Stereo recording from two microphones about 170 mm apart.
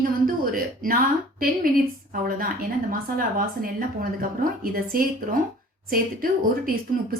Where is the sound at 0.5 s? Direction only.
55° right (ahead or behind).